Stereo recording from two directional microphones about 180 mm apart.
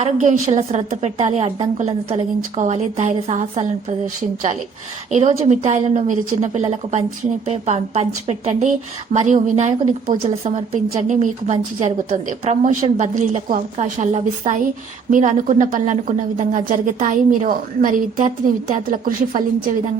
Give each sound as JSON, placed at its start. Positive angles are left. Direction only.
{"t": 0.0, "sound": "a woman's voice", "side_deg": -40}
{"t": 5.1, "sound": "a woman's voice", "side_deg": -40}